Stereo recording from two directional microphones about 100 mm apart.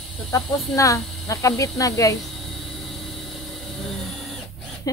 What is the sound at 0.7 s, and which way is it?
A woman's voice, 35° left (ahead or behind).